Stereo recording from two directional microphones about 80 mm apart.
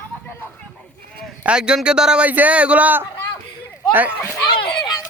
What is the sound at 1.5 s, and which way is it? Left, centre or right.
Speech, centre.